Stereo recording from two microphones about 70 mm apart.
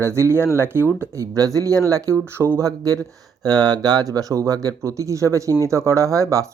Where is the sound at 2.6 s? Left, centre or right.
Right.